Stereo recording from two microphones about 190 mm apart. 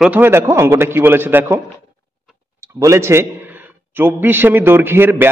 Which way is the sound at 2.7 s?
15° right (ahead or behind).